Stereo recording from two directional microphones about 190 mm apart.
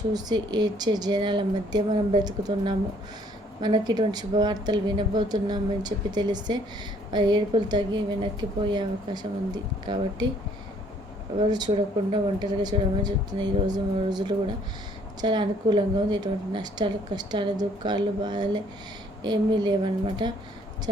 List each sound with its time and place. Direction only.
0.1 s a woman's voice: 20° right (ahead or behind)
11.3 s a woman's voice: 20° right (ahead or behind)